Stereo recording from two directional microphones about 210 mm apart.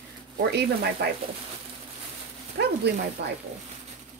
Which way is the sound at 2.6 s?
50° right (ahead or behind).